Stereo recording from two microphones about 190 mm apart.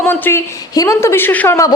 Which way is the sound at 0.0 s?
10° left (ahead or behind).